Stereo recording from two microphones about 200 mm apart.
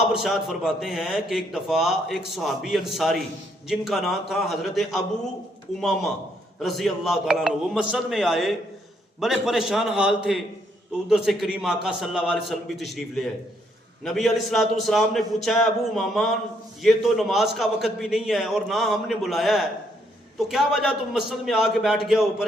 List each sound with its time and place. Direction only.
0.1 s a man's voice: centre (ahead or behind)
6.6 s a man's voice: centre (ahead or behind)